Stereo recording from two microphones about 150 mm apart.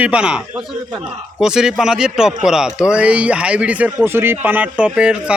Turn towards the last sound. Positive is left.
turn(degrees=-5)  # may be behind; listen again after turning